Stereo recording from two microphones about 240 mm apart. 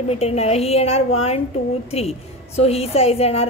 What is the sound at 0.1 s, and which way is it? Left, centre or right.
A woman's voice, left.